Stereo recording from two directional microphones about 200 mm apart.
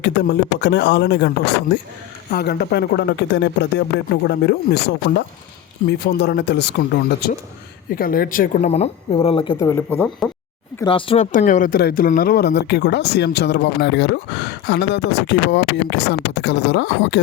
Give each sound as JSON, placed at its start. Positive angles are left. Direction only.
{"t": 0.0, "sound": "a woman's voice", "side_deg": 60}
{"t": 9.6, "sound": "speech", "side_deg": 15}
{"t": 10.2, "sound": "speech", "side_deg": 0}
{"t": 10.8, "sound": "speech", "side_deg": 25}
{"t": 11.3, "sound": "speech", "side_deg": 40}